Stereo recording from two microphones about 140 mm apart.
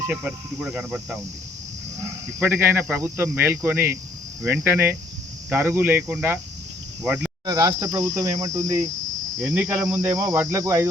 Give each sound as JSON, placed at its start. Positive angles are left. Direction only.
{"t": 0.1, "sound": "speech", "side_deg": -10}
{"t": 2.4, "sound": "speech", "side_deg": -15}
{"t": 7.4, "sound": "cricket", "side_deg": -25}